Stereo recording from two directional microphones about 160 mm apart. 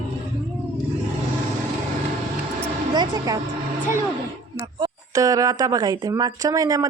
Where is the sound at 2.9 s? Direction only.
25° right (ahead or behind).